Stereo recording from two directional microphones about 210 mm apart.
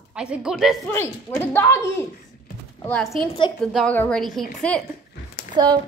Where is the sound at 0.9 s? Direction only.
10° left (ahead or behind).